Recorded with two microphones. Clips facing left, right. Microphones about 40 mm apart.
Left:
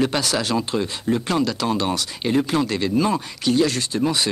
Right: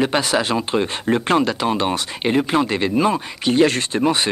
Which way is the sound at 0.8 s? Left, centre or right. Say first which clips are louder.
Right 3 dB; right.